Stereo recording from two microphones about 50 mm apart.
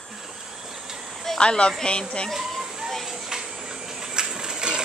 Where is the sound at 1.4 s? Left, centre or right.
Centre.